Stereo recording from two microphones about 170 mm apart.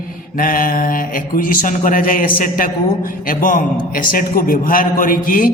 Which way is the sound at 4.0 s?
60° left (ahead or behind).